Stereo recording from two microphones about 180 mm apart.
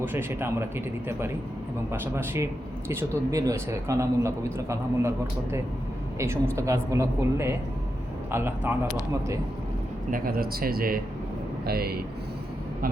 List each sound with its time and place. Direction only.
0.0 s a man's voice: 10° right (ahead or behind)
1.9 s a man's voice: 15° right (ahead or behind)
10.1 s speech: 55° right (ahead or behind)